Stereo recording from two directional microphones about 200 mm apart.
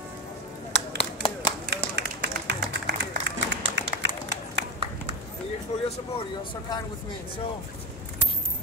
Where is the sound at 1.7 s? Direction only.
55° right (ahead or behind).